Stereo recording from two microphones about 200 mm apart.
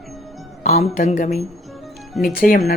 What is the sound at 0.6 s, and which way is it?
A man's voice, 35° left (ahead or behind).